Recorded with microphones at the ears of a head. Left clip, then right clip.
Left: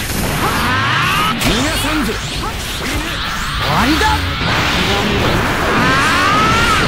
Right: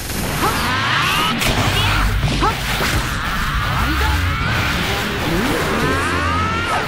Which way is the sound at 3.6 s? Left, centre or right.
Left.